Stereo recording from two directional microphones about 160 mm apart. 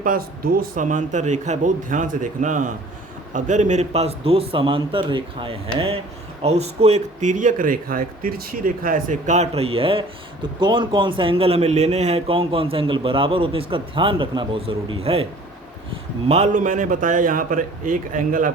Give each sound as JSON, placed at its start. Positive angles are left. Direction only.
{"t": 0.0, "sound": "a man's voice", "side_deg": -60}